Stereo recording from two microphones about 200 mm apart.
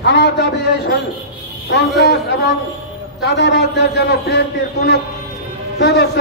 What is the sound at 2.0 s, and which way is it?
A man's voice, 55° left (ahead or behind).